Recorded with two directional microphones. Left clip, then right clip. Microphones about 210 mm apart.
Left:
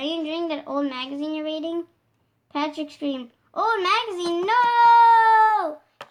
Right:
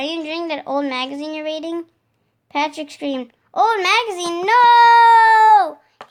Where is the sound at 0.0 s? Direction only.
40° right (ahead or behind).